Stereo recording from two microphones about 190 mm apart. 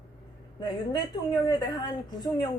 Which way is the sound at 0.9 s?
20° left (ahead or behind).